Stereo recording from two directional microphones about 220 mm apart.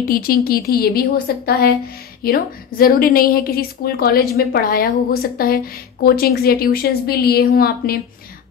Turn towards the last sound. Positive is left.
turn(degrees=45)  # may be behind; listen again after turning